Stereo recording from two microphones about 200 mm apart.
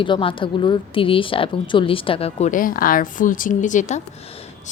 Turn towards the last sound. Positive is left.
turn(degrees=35)  # may be behind; listen again after turning